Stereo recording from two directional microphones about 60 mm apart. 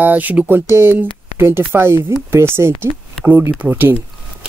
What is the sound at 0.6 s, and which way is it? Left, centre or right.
Speech, right.